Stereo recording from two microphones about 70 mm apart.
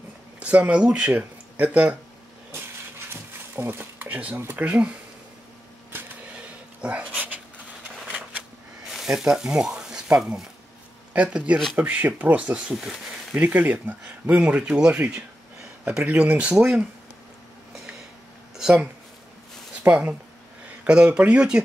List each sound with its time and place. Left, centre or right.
0.4 s speech: centre
2.5 s a sound: right
4.1 s speech: centre
6.3 s a sound: centre
8.9 s speech: centre
12.7 s speech: centre
13.3 s speech: right
18.6 s a sound: centre
19.9 s speech: right